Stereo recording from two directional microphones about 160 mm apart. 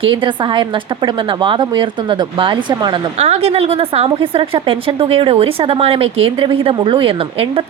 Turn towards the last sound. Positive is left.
turn(degrees=-35)  # may be behind; listen again after turning